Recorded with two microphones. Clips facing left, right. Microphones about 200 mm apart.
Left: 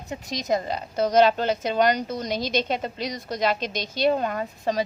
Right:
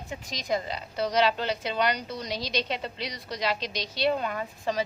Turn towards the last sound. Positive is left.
turn(degrees=40)  # may be behind; listen again after turning